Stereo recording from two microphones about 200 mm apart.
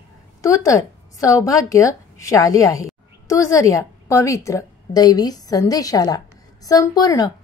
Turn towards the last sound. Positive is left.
turn(degrees=20)  # may be behind; listen again after turning